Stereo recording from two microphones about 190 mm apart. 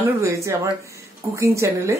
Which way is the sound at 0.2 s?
15° right (ahead or behind).